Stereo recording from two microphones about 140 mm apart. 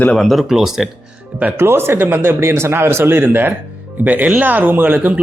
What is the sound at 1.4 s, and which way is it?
Speech, 15° right (ahead or behind).